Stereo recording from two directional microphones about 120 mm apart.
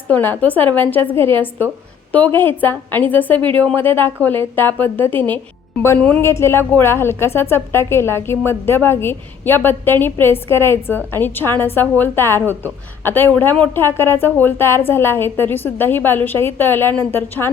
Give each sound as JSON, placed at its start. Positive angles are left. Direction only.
{"t": 0.1, "sound": "a woman's voice", "side_deg": 15}
{"t": 6.2, "sound": "a woman's voice", "side_deg": 20}